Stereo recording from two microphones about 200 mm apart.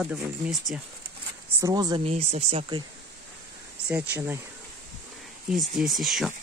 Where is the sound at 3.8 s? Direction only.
10° right (ahead or behind).